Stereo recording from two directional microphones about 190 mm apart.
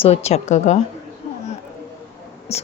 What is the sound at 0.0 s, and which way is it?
Speech, 35° left (ahead or behind).